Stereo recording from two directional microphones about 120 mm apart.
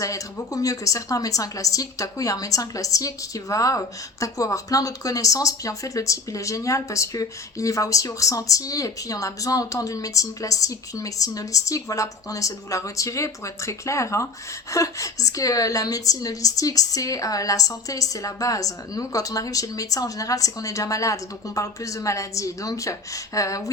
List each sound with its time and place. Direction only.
0.0 s a woman's voice: 30° left (ahead or behind)